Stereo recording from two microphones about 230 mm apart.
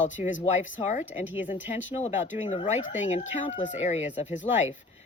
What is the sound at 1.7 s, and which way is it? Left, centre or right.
Speech, left.